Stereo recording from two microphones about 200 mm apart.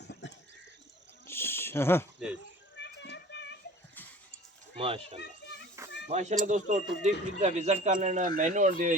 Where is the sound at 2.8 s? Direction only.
60° left (ahead or behind).